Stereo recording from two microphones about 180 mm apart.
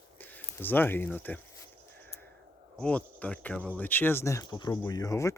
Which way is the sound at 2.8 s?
5° left (ahead or behind).